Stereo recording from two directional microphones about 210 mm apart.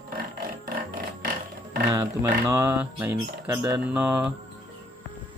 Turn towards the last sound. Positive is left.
turn(degrees=-5)  # may be behind; listen again after turning